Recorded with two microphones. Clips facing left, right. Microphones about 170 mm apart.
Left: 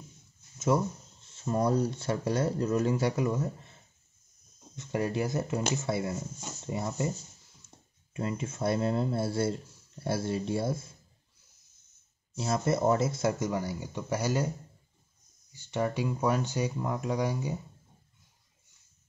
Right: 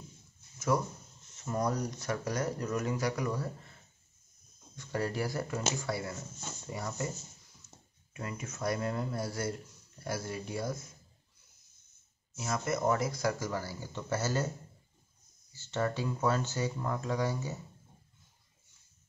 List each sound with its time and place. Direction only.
0.7 s speech: 25° left (ahead or behind)
4.7 s speech: 20° left (ahead or behind)
7.6 s a sound: 25° left (ahead or behind)
8.1 s speech: 25° left (ahead or behind)
12.4 s speech: 30° left (ahead or behind); by 14.5 s 15° left (ahead or behind)
15.5 s speech: 15° left (ahead or behind)